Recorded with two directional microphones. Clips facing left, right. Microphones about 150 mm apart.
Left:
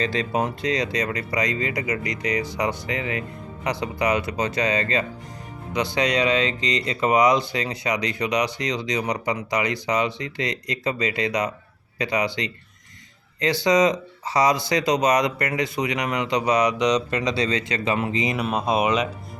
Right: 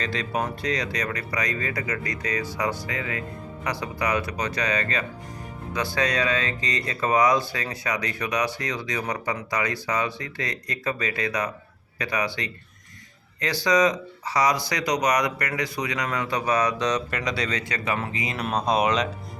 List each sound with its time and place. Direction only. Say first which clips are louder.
0.0 s speech: left 4 dB; 25° left (ahead or behind)
18.3 s speech: right 2 dB; 5° left (ahead or behind)